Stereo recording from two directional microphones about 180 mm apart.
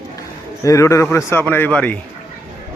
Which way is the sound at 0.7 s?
15° left (ahead or behind).